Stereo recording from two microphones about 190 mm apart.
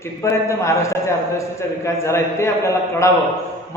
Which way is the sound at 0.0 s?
15° left (ahead or behind).